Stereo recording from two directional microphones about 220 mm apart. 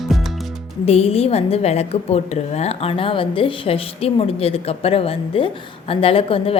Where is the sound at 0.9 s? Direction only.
30° left (ahead or behind).